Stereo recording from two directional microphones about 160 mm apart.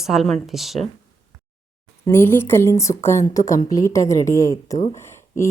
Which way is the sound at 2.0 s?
15° left (ahead or behind).